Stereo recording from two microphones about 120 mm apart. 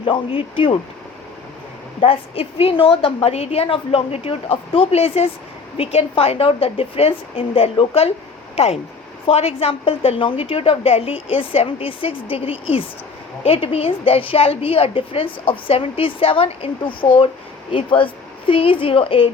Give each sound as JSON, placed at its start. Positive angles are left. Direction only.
{"t": 0.0, "sound": "a woman's voice", "side_deg": 50}
{"t": 2.0, "sound": "a woman's voice", "side_deg": 50}